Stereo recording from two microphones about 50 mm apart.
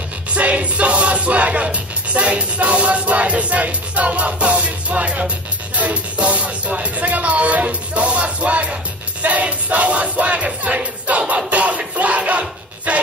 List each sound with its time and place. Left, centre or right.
0.3 s music: right
5.8 s speech: right
9.2 s a sound: right